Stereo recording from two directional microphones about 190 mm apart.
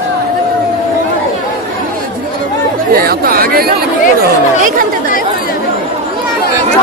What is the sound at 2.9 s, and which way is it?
Chatter, 50° right (ahead or behind).